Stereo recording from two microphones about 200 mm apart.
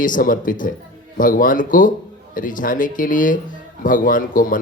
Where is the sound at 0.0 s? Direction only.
40° left (ahead or behind).